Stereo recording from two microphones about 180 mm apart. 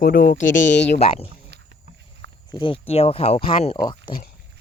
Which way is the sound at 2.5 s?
25° left (ahead or behind).